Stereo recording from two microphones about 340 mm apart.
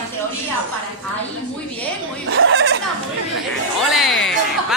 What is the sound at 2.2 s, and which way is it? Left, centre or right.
Speech, right.